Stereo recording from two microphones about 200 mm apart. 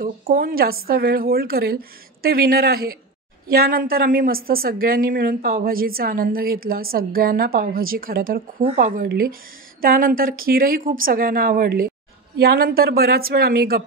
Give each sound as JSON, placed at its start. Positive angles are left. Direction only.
{"t": 0.0, "sound": "a woman's voice", "side_deg": -45}